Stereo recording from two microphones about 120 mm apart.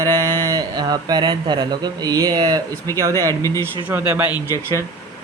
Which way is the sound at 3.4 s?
25° left (ahead or behind).